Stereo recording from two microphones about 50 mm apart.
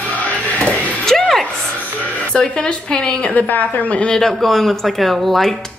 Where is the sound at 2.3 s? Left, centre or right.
Centre.